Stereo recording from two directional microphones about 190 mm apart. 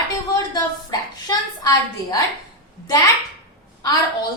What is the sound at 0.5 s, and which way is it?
A woman's voice, 20° left (ahead or behind).